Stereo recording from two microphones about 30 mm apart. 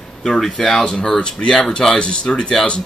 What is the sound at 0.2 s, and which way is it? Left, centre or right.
Speech, centre.